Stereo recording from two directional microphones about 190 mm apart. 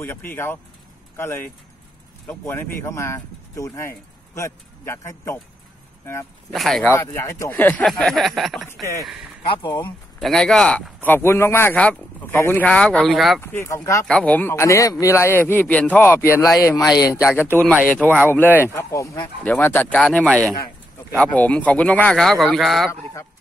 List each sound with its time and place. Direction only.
0.0 s speech: 10° left (ahead or behind)
6.5 s speech: centre (ahead or behind)
7.0 s speech: 15° left (ahead or behind)
9.5 s speech: 25° left (ahead or behind)
9.8 s speech: 5° left (ahead or behind)
13.4 s speech: 10° left (ahead or behind)
14.0 s speech: 5° left (ahead or behind)